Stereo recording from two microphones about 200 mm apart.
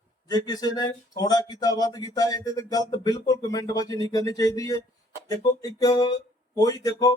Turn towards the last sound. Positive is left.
turn(degrees=15)  # may be behind; listen again after turning